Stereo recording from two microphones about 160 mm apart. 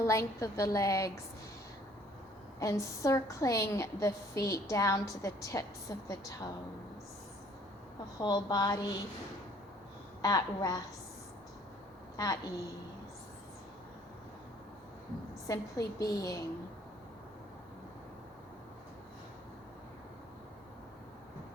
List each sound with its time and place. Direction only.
0.0 s a woman's voice: 20° left (ahead or behind)
2.6 s a woman's voice: 20° left (ahead or behind)
8.2 s a woman's voice: 25° left (ahead or behind)
10.2 s a woman's voice: 20° left (ahead or behind)
12.1 s a woman's voice: 25° left (ahead or behind)
15.4 s a woman's voice: 20° left (ahead or behind)